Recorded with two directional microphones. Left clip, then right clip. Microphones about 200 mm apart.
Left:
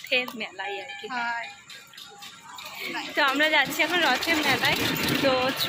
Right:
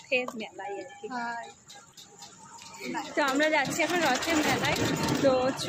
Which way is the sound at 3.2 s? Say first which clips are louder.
Left 4 dB; 10° right (ahead or behind).